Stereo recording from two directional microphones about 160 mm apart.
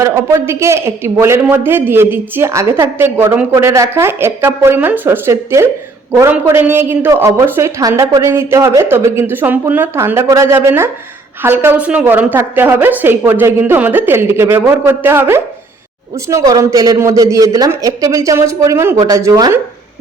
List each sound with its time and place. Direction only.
0.0 s a man's voice: 15° right (ahead or behind)